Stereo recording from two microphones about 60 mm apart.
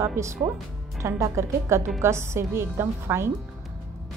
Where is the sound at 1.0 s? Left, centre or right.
Right.